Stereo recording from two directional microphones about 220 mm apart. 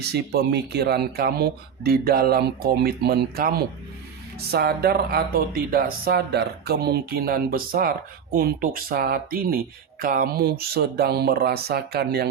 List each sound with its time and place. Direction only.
0.0 s speech: 50° right (ahead or behind)